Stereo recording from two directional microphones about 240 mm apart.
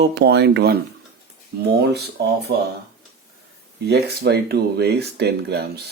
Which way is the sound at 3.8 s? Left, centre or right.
Right.